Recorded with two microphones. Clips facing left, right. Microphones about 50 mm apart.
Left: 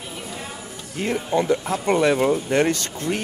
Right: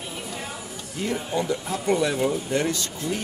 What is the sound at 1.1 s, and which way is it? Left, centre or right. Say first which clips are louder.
Speech: left 6 dB; left.